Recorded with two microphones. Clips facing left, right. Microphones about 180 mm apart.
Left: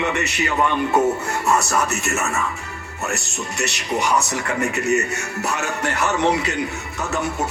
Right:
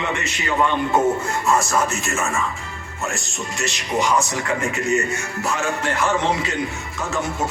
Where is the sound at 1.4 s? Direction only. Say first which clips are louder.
Even; 65° left (ahead or behind).